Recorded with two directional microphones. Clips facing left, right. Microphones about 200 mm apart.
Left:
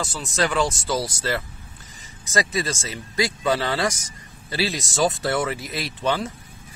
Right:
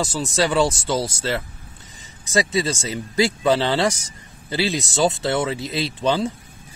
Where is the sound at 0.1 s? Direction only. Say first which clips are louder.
Right 4 dB; 30° right (ahead or behind).